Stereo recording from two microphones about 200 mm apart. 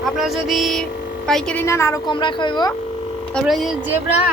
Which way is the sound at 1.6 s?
15° left (ahead or behind).